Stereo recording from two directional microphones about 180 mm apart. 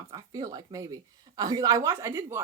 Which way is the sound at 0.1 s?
20° right (ahead or behind).